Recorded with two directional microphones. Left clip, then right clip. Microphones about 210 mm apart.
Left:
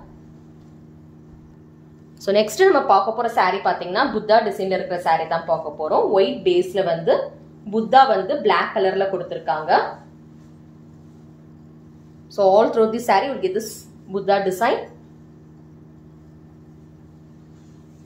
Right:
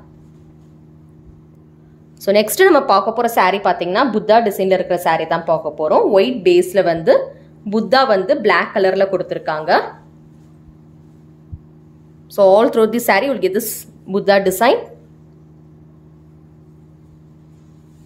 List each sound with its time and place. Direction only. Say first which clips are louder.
2.2 s a woman's voice: right 4 dB; 30° right (ahead or behind); by 9.8 s 50° right (ahead or behind)
12.4 s speech: right 4 dB; 40° right (ahead or behind)